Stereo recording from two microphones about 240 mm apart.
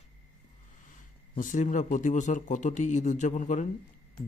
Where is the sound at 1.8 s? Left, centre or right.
Left.